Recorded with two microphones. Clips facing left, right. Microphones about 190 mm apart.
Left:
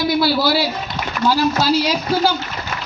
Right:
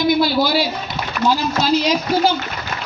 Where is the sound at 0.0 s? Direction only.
15° right (ahead or behind).